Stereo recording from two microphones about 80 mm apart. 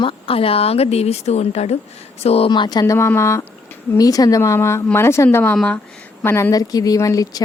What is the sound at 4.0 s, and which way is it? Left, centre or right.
Speech, left.